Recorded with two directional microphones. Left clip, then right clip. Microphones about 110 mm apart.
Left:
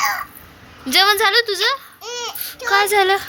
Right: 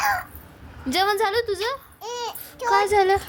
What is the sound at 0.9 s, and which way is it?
A child's voice, 25° right (ahead or behind).